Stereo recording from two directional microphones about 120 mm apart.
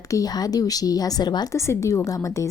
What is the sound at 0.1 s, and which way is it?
A woman's voice, 30° left (ahead or behind).